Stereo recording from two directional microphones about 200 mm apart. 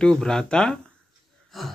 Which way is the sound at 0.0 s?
5° left (ahead or behind).